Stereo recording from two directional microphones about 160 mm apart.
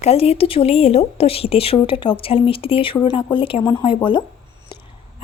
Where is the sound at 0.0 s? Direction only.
40° left (ahead or behind).